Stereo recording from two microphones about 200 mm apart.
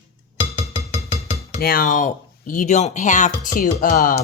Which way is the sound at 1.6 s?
45° left (ahead or behind).